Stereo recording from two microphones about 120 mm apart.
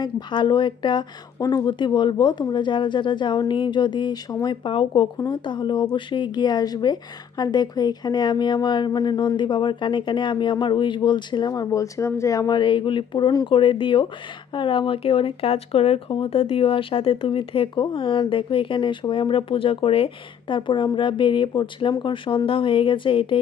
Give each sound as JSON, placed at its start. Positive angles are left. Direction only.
{"t": 0.0, "sound": "speech", "side_deg": 40}
{"t": 4.6, "sound": "speech", "side_deg": 45}